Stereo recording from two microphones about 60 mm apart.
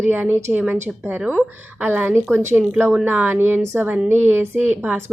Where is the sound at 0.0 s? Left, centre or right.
Right.